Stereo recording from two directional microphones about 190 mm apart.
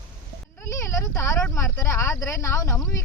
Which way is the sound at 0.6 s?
15° left (ahead or behind).